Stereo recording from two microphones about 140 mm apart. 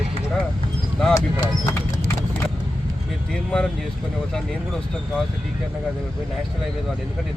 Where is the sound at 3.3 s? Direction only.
5° left (ahead or behind).